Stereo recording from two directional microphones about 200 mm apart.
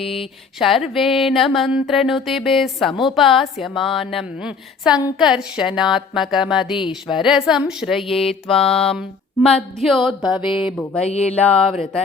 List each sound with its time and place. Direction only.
0.6 s a woman's voice: centre (ahead or behind)
11.0 s a sound: 30° left (ahead or behind)
11.3 s a woman's voice: 5° left (ahead or behind)